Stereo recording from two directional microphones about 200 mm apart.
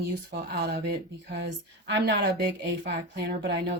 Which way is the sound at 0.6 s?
55° right (ahead or behind).